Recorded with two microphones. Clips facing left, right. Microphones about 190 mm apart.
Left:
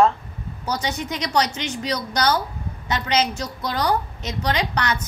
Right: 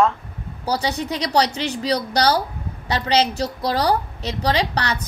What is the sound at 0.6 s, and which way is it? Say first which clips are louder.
A woman's voice: right 3 dB; 35° right (ahead or behind).